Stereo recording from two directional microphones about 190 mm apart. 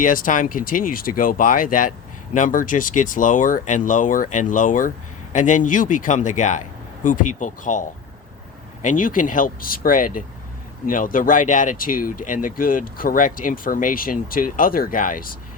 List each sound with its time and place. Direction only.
0.0 s a man's voice: 45° left (ahead or behind)